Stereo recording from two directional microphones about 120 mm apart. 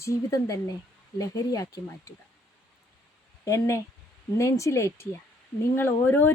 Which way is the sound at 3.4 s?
25° left (ahead or behind).